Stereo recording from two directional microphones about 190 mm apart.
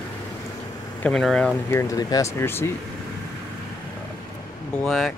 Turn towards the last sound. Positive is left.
turn(degrees=0)  # may be behind; listen again after turning